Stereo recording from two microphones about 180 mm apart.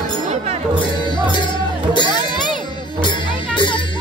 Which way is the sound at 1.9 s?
25° left (ahead or behind).